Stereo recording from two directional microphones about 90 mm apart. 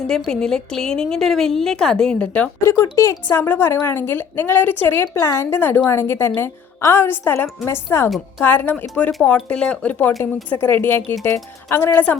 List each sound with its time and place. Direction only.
0.1 s a woman's voice: 10° left (ahead or behind)
2.6 s speech: 30° left (ahead or behind)
3.2 s a woman's voice: 20° left (ahead or behind)